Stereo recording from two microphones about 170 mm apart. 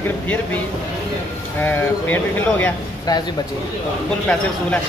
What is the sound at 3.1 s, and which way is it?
Speech, 20° left (ahead or behind).